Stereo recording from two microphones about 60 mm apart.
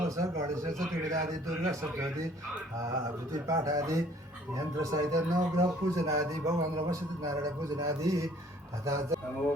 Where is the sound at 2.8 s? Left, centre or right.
Right.